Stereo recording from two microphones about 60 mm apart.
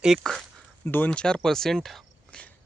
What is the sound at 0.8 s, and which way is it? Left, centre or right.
Speech, left.